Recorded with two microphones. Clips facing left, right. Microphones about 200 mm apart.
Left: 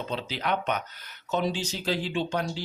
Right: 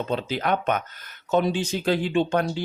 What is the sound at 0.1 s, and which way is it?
Speech, 50° right (ahead or behind).